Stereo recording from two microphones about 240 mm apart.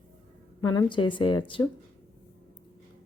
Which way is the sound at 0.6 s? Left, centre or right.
Centre.